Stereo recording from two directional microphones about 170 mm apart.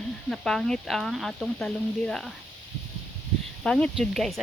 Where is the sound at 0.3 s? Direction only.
5° left (ahead or behind).